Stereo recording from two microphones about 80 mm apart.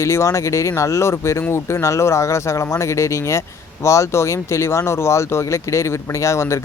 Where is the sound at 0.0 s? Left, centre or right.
Left.